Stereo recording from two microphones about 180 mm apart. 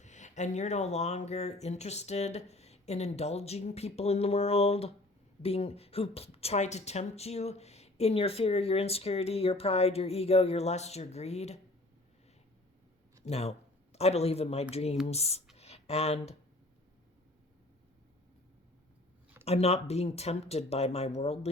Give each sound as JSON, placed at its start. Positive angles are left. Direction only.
{"t": 0.0, "sound": "speech", "side_deg": 40}
{"t": 13.2, "sound": "speech", "side_deg": 35}
{"t": 15.5, "sound": "a sound", "side_deg": 35}
{"t": 19.5, "sound": "speech", "side_deg": 35}